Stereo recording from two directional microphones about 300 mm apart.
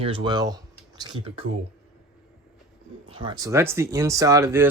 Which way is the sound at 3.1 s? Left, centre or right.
Centre.